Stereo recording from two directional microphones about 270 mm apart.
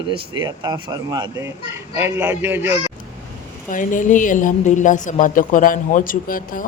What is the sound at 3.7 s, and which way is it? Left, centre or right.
A woman's voice, left.